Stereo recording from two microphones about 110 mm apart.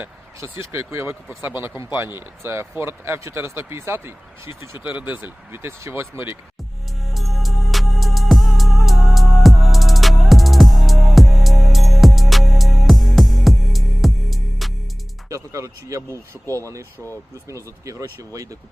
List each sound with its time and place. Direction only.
0.7 s speech: 25° right (ahead or behind)
7.0 s music: centre (ahead or behind)
15.3 s speech: 30° right (ahead or behind)